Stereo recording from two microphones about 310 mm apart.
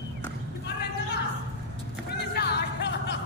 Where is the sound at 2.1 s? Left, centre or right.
Left.